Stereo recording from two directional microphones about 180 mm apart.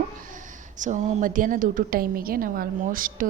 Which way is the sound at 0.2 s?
45° right (ahead or behind).